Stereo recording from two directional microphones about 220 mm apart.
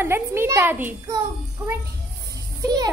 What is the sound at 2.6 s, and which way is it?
Music, 15° right (ahead or behind).